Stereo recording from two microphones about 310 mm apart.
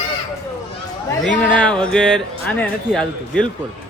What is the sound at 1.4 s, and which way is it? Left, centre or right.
Speech, centre.